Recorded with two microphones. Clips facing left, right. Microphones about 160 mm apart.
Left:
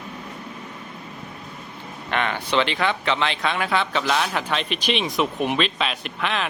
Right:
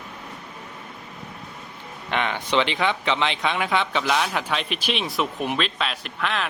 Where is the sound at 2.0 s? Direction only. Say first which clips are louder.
Left 1 dB; 15° right (ahead or behind).